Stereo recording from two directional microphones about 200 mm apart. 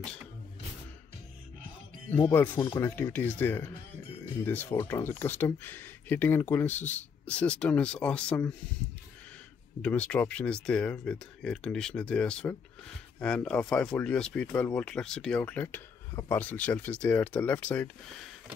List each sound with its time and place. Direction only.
2.2 s speech: 10° left (ahead or behind)
9.8 s speech: 5° left (ahead or behind)